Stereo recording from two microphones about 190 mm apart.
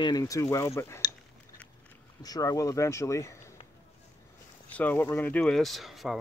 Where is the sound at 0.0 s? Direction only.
20° left (ahead or behind).